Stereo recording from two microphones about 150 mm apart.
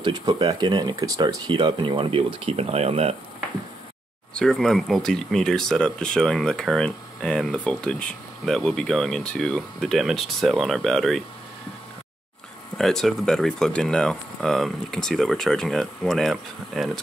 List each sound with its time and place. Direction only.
0.0 s speech: 25° right (ahead or behind); by 3.2 s 45° right (ahead or behind)
4.3 s speech: 5° left (ahead or behind)
12.7 s speech: 5° left (ahead or behind)